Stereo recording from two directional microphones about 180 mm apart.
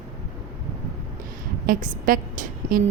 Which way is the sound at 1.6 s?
50° right (ahead or behind).